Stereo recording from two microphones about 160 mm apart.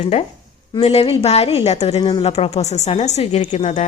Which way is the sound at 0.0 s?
40° left (ahead or behind).